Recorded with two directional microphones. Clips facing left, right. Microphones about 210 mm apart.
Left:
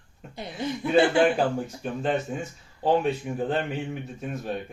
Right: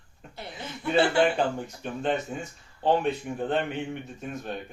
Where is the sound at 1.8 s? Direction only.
Centre (ahead or behind).